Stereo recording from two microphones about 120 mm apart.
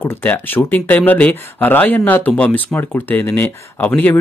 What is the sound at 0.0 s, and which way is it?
Speech, 15° left (ahead or behind).